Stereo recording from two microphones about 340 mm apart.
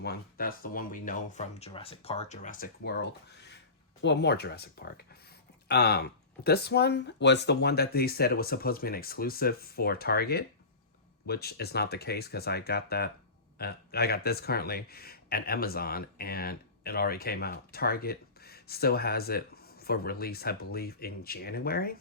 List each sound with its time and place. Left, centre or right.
0.0 s speech: left